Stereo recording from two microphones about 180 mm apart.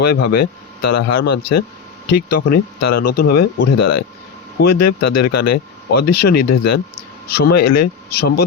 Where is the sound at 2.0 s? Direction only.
65° left (ahead or behind).